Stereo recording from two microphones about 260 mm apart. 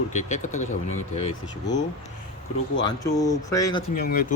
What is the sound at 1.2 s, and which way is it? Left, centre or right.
Speech, centre.